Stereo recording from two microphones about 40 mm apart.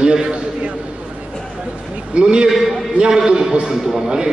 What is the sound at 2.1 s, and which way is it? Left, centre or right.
Speech, right.